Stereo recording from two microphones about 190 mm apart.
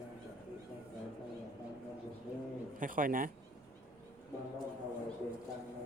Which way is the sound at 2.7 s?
45° right (ahead or behind).